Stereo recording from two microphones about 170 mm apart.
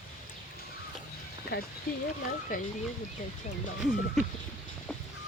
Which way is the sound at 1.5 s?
65° left (ahead or behind).